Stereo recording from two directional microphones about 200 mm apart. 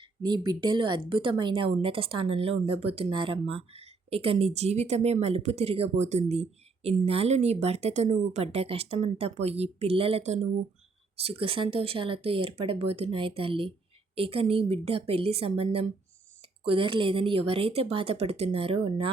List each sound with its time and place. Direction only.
0.0 s speech: 20° right (ahead or behind)